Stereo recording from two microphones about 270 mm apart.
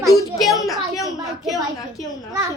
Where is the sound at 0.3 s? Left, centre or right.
Centre.